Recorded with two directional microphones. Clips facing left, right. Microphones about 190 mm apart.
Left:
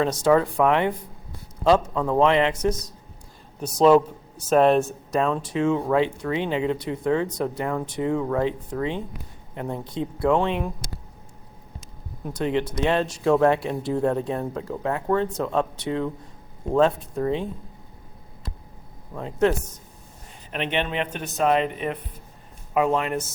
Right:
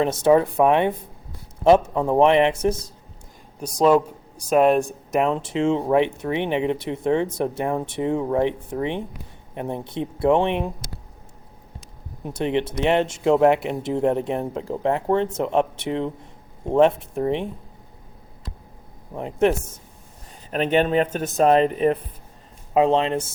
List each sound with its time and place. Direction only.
0.0 s speech: 20° right (ahead or behind)
3.6 s a man's voice: 10° right (ahead or behind)
12.2 s speech: 20° right (ahead or behind)
19.1 s speech: 20° right (ahead or behind)
20.5 s speech: 40° right (ahead or behind)
22.7 s speech: 25° right (ahead or behind)